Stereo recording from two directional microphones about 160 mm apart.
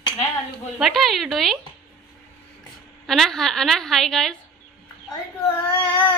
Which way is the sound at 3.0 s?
Centre (ahead or behind).